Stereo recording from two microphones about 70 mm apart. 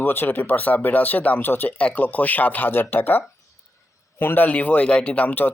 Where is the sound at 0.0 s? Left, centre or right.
Left.